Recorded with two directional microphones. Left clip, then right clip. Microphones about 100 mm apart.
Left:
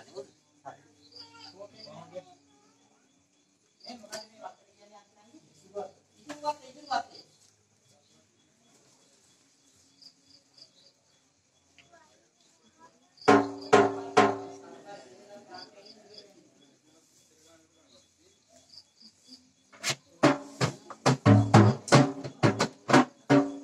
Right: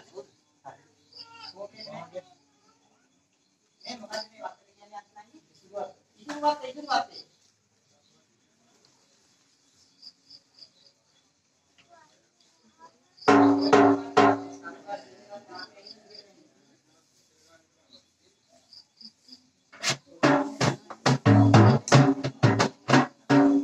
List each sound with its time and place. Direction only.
0.0 s cricket: 35° right (ahead or behind)
3.8 s a sound: 40° right (ahead or behind)
12.8 s music: 35° right (ahead or behind)
19.8 s music: 50° right (ahead or behind)
20.3 s music: 35° right (ahead or behind)
22.4 s music: 50° right (ahead or behind)